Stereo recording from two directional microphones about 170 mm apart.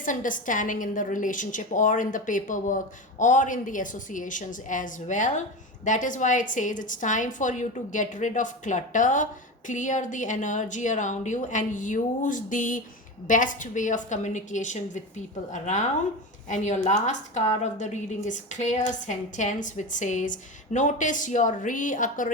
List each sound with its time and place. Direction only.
0.0 s a woman's voice: 50° left (ahead or behind)